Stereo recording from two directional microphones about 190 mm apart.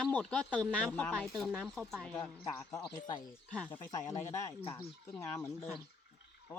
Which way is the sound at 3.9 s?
15° left (ahead or behind).